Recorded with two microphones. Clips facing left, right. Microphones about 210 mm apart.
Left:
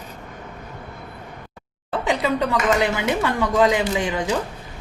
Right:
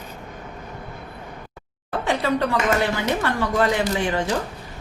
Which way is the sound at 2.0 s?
15° left (ahead or behind).